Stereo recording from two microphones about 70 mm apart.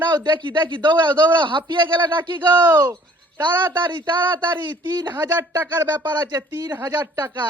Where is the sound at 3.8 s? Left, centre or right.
Right.